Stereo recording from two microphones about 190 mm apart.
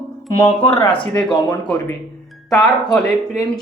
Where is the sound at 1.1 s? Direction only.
5° left (ahead or behind).